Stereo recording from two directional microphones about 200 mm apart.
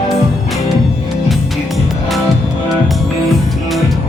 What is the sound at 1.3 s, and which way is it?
Music, centre (ahead or behind).